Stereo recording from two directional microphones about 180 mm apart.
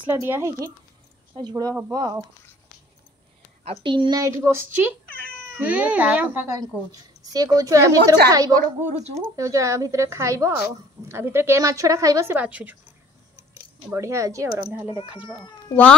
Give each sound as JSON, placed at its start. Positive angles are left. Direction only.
{"t": 0.0, "sound": "speech", "side_deg": -10}
{"t": 3.8, "sound": "speech", "side_deg": -25}
{"t": 8.5, "sound": "a woman's voice", "side_deg": -40}
{"t": 9.2, "sound": "speech", "side_deg": -15}
{"t": 13.9, "sound": "speech", "side_deg": -15}
{"t": 15.7, "sound": "speech", "side_deg": 10}